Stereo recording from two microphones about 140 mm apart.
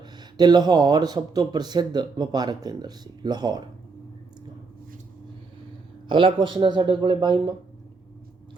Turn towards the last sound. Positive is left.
turn(degrees=-35)  # may be behind; listen again after turning